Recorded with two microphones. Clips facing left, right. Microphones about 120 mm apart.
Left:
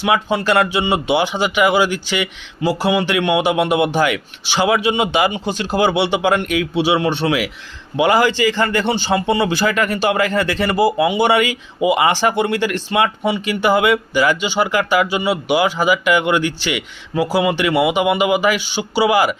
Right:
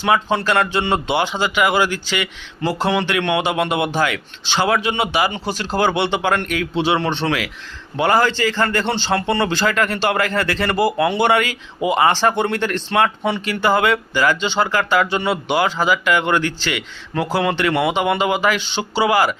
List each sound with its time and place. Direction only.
0.3 s speech: 10° left (ahead or behind)